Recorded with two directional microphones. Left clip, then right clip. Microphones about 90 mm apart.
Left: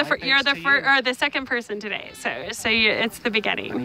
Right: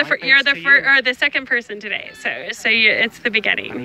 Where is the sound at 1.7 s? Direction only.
40° left (ahead or behind).